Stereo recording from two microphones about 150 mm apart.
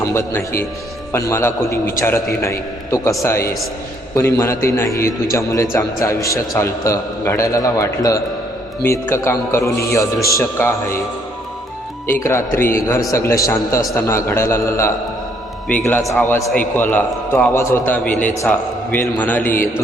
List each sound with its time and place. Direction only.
0.0 s a man's voice: 20° left (ahead or behind)
12.2 s a man's voice: 15° left (ahead or behind)